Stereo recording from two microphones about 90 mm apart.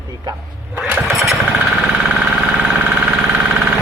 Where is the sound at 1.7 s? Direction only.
10° right (ahead or behind).